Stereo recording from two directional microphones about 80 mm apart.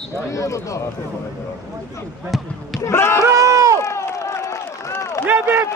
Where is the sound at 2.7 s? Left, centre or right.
Left.